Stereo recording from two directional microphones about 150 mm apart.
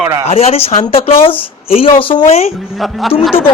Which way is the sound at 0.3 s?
45° left (ahead or behind).